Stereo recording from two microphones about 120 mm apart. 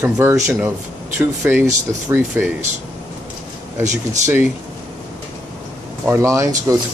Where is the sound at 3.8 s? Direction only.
80° right.